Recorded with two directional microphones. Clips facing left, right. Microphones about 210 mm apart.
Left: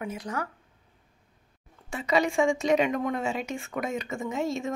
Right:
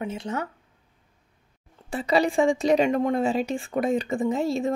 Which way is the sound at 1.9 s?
35° right (ahead or behind).